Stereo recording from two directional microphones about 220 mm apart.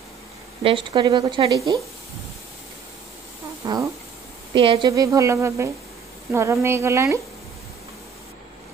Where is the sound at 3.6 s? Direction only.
15° right (ahead or behind).